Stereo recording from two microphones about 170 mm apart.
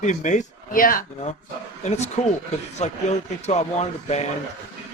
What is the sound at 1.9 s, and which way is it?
Speech, 40° left (ahead or behind).